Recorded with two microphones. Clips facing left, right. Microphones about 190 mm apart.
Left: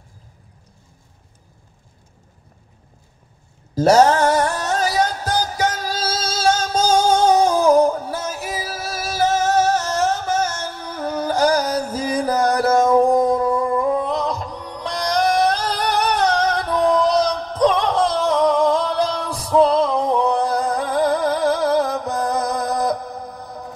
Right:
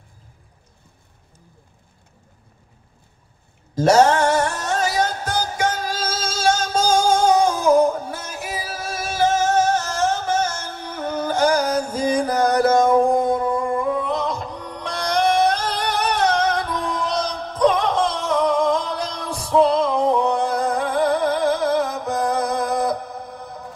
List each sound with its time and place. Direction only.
3.7 s a sound: 35° left (ahead or behind)
4.3 s music: 35° left (ahead or behind)
10.3 s music: 30° right (ahead or behind)
10.9 s music: 35° left (ahead or behind)
20.2 s a sound: 35° left (ahead or behind)
21.0 s music: 35° left (ahead or behind)